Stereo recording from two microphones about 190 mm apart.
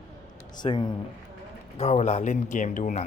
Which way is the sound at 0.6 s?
25° left (ahead or behind).